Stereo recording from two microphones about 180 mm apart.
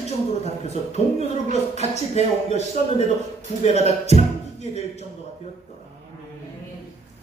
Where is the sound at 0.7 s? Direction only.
35° left (ahead or behind).